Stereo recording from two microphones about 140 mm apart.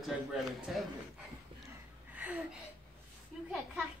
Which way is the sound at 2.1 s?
10° right (ahead or behind).